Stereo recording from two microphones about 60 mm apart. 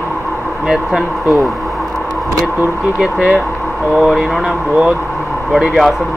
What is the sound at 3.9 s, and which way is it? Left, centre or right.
Speech, centre.